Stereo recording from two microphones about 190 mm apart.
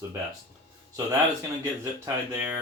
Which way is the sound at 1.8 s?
15° right (ahead or behind).